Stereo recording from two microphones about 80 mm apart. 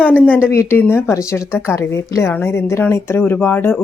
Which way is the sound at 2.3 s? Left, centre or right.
Left.